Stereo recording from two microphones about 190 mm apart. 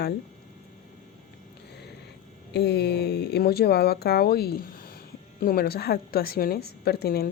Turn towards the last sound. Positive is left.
turn(degrees=55)  # may be behind; listen again after turning